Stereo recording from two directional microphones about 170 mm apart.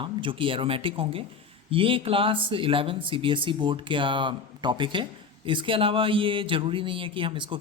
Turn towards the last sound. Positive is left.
turn(degrees=-30)  # may be behind; listen again after turning